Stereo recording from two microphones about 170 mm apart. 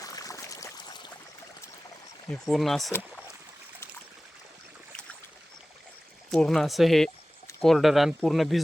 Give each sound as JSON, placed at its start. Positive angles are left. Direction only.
{"t": 0.0, "sound": "a sound", "side_deg": 20}
{"t": 2.5, "sound": "speech", "side_deg": 0}
{"t": 6.3, "sound": "speech", "side_deg": 5}